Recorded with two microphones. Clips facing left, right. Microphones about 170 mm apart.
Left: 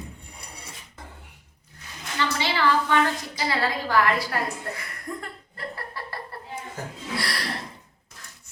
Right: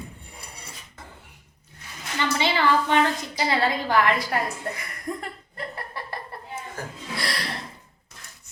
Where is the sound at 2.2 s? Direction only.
20° right (ahead or behind).